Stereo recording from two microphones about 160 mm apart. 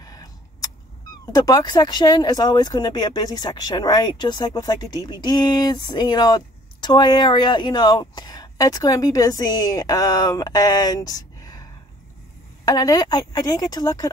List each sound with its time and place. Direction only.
0.0 s vehicle: 25° left (ahead or behind)
1.3 s speech: 20° left (ahead or behind)
12.6 s speech: 25° left (ahead or behind)